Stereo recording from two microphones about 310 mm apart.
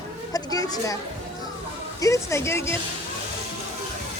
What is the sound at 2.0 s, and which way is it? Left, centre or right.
Speech, centre.